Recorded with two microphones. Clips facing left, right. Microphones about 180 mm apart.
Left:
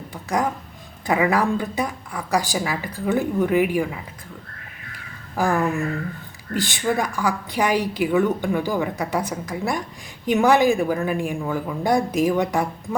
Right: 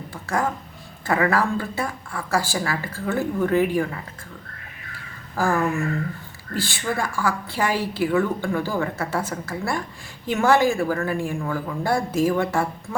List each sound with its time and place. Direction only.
0.1 s a woman's voice: 15° left (ahead or behind)
5.4 s a woman's voice: 15° left (ahead or behind)